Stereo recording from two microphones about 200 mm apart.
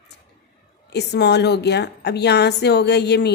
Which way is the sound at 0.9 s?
55° left (ahead or behind).